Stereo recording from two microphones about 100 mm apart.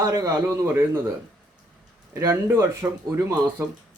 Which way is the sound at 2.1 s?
30° right (ahead or behind).